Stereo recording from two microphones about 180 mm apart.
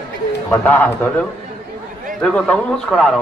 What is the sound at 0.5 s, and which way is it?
A man's voice, 10° left (ahead or behind).